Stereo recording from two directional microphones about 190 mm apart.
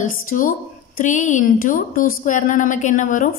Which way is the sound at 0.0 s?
45° left (ahead or behind).